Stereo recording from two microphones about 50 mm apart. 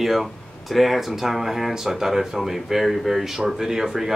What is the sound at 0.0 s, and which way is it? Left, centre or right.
Speech, centre.